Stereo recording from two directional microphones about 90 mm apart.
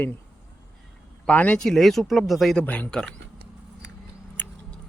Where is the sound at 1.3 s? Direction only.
15° left (ahead or behind).